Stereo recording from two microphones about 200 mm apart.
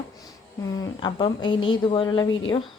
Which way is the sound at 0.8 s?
25° left (ahead or behind).